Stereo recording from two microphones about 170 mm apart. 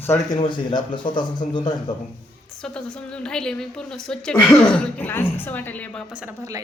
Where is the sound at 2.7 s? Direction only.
5° left (ahead or behind).